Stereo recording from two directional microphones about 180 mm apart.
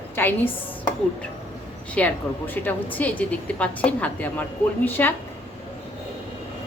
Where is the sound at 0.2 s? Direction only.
10° left (ahead or behind).